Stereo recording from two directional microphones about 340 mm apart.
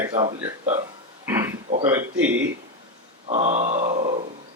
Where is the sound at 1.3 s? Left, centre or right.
Centre.